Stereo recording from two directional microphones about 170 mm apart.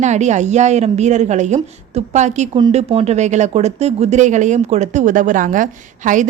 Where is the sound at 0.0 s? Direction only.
45° right (ahead or behind).